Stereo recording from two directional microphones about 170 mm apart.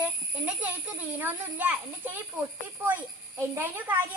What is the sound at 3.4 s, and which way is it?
Speech, 10° right (ahead or behind).